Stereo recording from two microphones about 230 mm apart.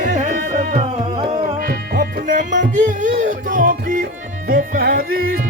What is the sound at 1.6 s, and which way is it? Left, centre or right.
Music, right.